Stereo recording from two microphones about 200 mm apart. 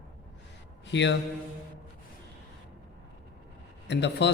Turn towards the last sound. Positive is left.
turn(degrees=60)  # may be behind; listen again after turning